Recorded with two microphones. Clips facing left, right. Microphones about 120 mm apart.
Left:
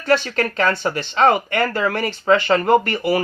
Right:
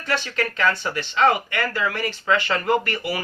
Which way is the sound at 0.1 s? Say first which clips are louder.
Left 7 dB; 40° left (ahead or behind).